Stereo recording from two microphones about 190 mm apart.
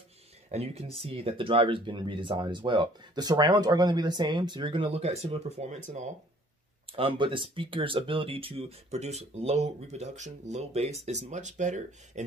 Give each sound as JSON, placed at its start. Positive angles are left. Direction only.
{"t": 0.5, "sound": "speech", "side_deg": -35}
{"t": 6.9, "sound": "speech", "side_deg": -30}